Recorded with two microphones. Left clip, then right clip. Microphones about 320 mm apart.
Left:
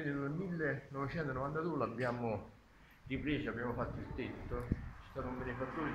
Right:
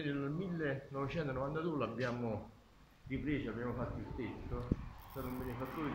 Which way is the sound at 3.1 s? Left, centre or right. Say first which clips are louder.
Left 1 dB; left.